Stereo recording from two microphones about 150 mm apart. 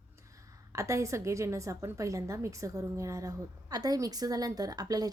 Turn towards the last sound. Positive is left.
turn(degrees=-25)  # may be behind; listen again after turning